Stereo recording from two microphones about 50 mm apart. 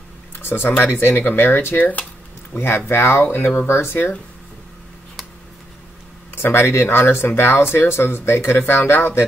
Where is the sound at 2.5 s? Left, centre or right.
Left.